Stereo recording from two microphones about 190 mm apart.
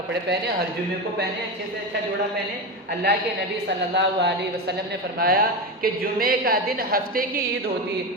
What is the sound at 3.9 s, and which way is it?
A woman's voice, 60° right (ahead or behind).